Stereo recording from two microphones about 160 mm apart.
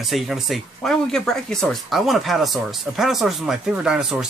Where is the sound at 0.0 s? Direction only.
Centre (ahead or behind).